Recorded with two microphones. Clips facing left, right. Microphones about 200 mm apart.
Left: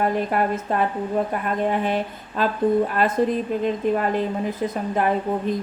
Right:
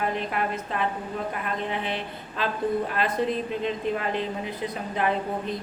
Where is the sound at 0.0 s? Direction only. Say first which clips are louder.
Left 6 dB; 45° left (ahead or behind).